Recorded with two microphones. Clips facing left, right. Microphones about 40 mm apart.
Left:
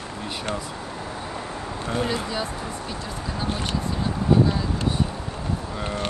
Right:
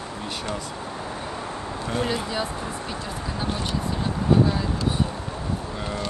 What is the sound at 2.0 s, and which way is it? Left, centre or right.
Speech, centre.